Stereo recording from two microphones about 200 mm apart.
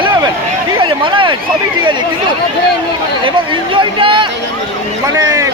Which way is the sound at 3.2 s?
25° right (ahead or behind).